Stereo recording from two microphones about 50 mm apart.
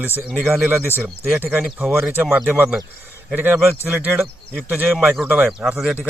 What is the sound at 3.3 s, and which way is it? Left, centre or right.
Speech, right.